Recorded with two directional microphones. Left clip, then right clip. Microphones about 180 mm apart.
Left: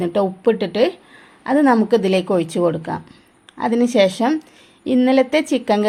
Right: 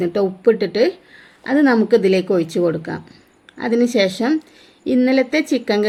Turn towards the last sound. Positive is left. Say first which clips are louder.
# left 1 dB
turn(degrees=25)  # may be behind; listen again after turning